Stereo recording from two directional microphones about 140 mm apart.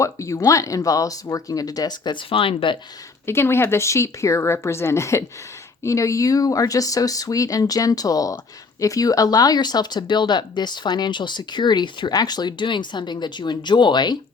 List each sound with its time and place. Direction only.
0.0 s speech: 20° left (ahead or behind); by 2.7 s 40° left (ahead or behind)
3.2 s speech: 15° left (ahead or behind)